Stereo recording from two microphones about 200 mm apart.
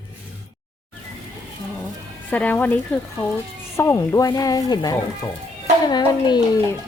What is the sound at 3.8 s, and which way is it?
Speech, 15° left (ahead or behind).